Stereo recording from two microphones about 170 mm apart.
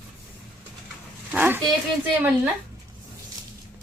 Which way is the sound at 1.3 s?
10° right (ahead or behind).